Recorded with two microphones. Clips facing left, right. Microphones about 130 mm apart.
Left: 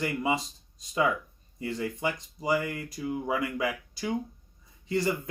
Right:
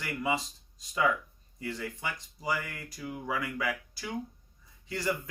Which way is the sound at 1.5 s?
25° left (ahead or behind).